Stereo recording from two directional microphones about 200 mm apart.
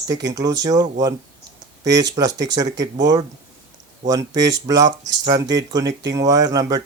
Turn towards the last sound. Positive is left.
turn(degrees=-20)  # may be behind; listen again after turning